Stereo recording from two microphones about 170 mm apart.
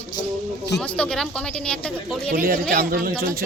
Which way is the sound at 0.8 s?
5° left (ahead or behind).